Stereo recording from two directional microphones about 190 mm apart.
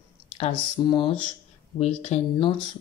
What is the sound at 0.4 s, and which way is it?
Speech, 25° left (ahead or behind).